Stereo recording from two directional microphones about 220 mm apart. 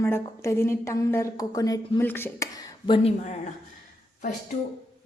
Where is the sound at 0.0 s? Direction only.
10° left (ahead or behind); by 3.5 s 30° left (ahead or behind).